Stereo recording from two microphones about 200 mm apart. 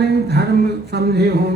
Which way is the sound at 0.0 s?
55° right (ahead or behind).